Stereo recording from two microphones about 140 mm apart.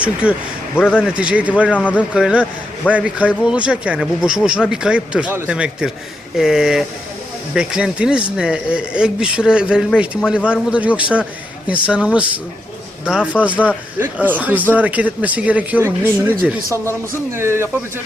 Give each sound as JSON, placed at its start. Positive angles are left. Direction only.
{"t": 0.0, "sound": "speech", "side_deg": -10}
{"t": 1.7, "sound": "speech", "side_deg": 10}
{"t": 2.0, "sound": "speech", "side_deg": -5}